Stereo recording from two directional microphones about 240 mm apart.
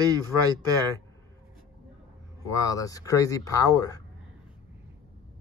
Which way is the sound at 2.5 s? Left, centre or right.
Centre.